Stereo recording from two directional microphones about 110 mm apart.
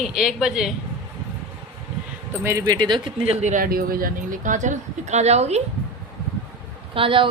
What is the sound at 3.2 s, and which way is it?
Speech, 80° right.